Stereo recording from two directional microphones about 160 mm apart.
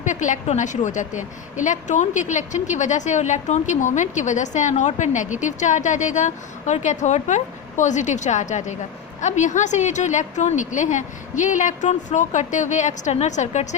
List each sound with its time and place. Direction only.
0.0 s a woman's voice: 50° left (ahead or behind)